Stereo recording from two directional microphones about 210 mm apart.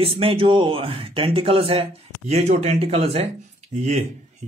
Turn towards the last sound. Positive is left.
turn(degrees=-35)  # may be behind; listen again after turning